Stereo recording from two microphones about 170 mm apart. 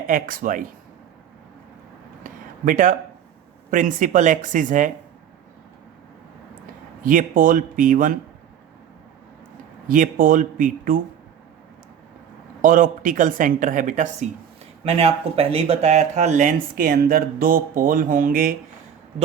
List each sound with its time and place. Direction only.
0.1 s speech: 55° right (ahead or behind)
2.2 s a sound: 50° right (ahead or behind)
3.7 s speech: 50° right (ahead or behind)
7.0 s speech: 50° right (ahead or behind)
9.9 s speech: 50° right (ahead or behind)
12.6 s speech: 55° right (ahead or behind)
14.8 s speech: 35° right (ahead or behind); by 18.5 s 55° right (ahead or behind)